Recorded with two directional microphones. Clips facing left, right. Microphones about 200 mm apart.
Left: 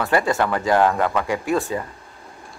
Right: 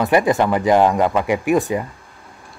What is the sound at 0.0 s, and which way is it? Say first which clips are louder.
Speech: right 4 dB; 15° right (ahead or behind).